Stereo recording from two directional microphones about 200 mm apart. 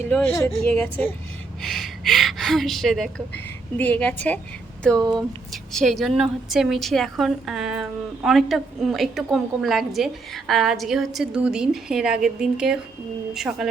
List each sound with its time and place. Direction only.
0.1 s a woman's voice: 10° left (ahead or behind)
4.9 s speech: 20° right (ahead or behind)
5.7 s a woman's voice: centre (ahead or behind)